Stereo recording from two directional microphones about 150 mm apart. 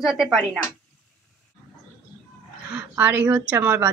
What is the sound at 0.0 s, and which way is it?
Speech, centre (ahead or behind).